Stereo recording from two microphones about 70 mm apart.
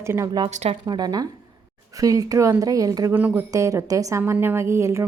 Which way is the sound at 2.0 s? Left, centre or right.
Right.